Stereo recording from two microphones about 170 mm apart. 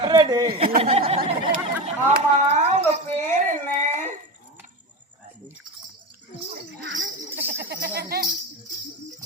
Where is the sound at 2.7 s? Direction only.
40° right (ahead or behind).